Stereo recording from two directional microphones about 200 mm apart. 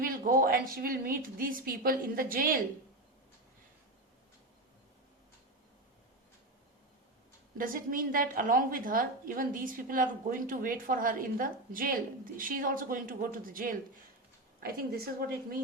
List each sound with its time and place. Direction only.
0.0 s a woman's voice: 45° right (ahead or behind)
7.6 s a woman's voice: 45° right (ahead or behind)